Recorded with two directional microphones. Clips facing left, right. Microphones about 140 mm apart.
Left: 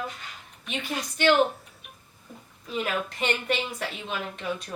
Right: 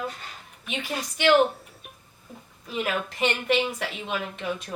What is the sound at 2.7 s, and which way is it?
A woman's voice, 5° right (ahead or behind).